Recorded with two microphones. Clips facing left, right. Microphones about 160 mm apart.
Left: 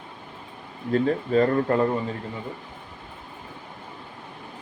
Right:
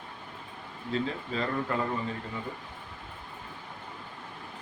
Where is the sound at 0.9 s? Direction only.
50° left (ahead or behind).